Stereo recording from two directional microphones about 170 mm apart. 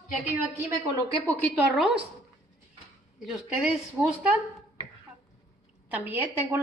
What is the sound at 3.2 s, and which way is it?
A woman's voice, centre (ahead or behind).